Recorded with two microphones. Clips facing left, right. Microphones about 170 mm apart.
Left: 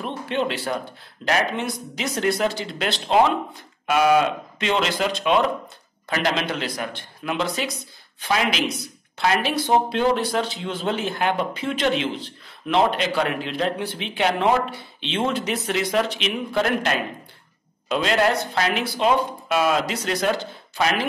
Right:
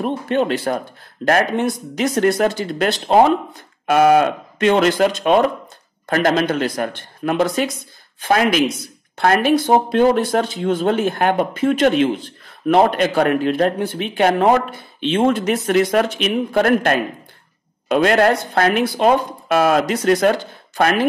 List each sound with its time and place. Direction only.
0.0 s speech: 45° right (ahead or behind)